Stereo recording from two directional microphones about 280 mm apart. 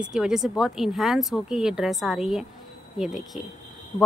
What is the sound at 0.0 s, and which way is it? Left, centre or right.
A woman's voice, centre.